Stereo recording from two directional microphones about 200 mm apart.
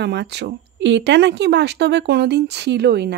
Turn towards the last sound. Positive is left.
turn(degrees=-55)  # may be behind; listen again after turning